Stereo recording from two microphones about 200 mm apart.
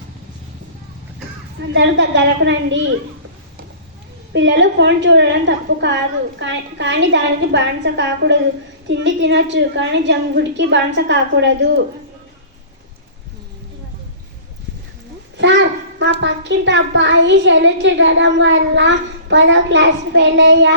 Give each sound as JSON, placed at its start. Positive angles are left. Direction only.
{"t": 1.7, "sound": "a woman's voice", "side_deg": -65}
{"t": 4.4, "sound": "a woman's voice", "side_deg": -65}
{"t": 15.4, "sound": "a sound", "side_deg": -65}
{"t": 16.2, "sound": "a woman's voice", "side_deg": -65}